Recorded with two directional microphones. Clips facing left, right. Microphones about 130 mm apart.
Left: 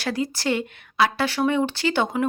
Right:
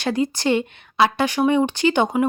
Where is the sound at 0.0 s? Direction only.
20° right (ahead or behind).